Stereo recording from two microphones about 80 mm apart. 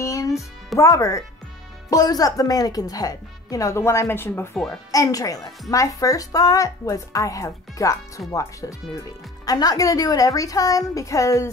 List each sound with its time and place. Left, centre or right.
0.0 s music: left
0.7 s speech: left
4.9 s speech: left